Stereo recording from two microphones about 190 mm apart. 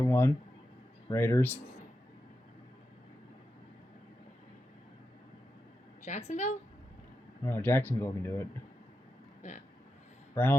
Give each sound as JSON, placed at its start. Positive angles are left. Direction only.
{"t": 0.0, "sound": "speech", "side_deg": 10}
{"t": 6.1, "sound": "a woman's voice", "side_deg": 35}
{"t": 7.4, "sound": "speech", "side_deg": 10}